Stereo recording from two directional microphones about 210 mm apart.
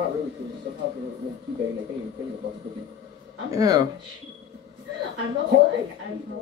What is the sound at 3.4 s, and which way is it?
Speech, 15° right (ahead or behind).